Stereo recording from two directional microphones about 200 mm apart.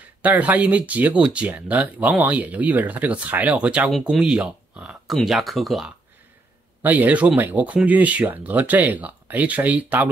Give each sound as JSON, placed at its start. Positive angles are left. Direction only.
{"t": 0.2, "sound": "speech", "side_deg": -10}